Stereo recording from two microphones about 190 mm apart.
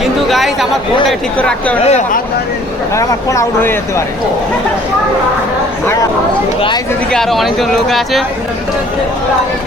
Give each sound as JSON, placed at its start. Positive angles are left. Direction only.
{"t": 0.0, "sound": "chatter", "side_deg": 0}
{"t": 1.4, "sound": "speech", "side_deg": 5}
{"t": 1.8, "sound": "speech", "side_deg": 35}
{"t": 2.9, "sound": "speech", "side_deg": 15}
{"t": 5.8, "sound": "a sound", "side_deg": 15}
{"t": 7.1, "sound": "speech", "side_deg": 0}